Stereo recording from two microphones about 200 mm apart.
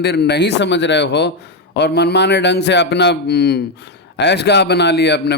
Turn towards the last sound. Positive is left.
turn(degrees=55)  # may be behind; listen again after turning